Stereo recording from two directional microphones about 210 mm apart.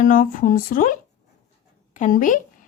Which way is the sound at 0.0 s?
40° left (ahead or behind).